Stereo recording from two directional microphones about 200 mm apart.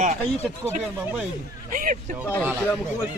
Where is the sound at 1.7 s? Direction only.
45° right (ahead or behind).